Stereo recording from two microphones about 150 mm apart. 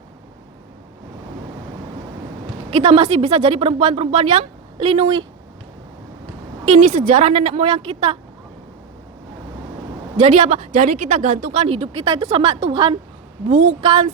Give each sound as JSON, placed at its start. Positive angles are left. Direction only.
{"t": 2.6, "sound": "speech", "side_deg": -40}
{"t": 6.7, "sound": "a woman's voice", "side_deg": -55}
{"t": 10.2, "sound": "a woman's voice", "side_deg": -50}
{"t": 13.5, "sound": "a woman's voice", "side_deg": -60}
{"t": 13.8, "sound": "speech", "side_deg": -35}